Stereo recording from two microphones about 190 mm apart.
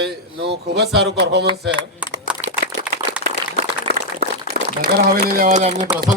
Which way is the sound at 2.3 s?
5° right (ahead or behind).